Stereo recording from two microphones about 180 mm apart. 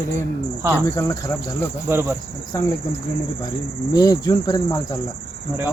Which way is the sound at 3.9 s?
20° left (ahead or behind).